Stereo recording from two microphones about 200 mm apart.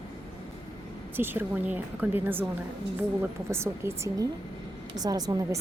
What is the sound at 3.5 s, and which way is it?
A woman's voice, 10° right (ahead or behind).